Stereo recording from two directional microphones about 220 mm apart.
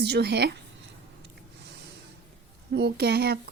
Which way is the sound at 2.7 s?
50° right (ahead or behind).